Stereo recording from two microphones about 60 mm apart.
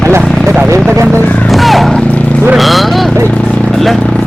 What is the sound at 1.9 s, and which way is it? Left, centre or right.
Vehicle, left.